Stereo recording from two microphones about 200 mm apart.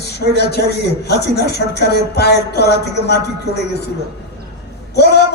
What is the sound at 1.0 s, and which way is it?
Speech, 55° left (ahead or behind).